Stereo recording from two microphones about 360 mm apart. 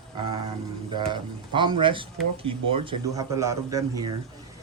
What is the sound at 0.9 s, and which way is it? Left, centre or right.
Speech, centre.